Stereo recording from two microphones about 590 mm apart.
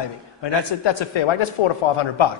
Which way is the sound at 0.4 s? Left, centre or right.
Left.